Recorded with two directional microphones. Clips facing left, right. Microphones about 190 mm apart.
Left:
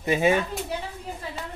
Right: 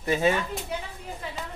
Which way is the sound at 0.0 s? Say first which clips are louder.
Left 2 dB; 15° left (ahead or behind).